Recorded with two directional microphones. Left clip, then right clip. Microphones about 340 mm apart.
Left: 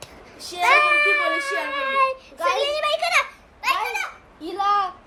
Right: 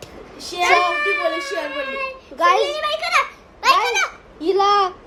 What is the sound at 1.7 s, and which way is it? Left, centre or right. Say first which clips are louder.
Child singing: left 5 dB; centre.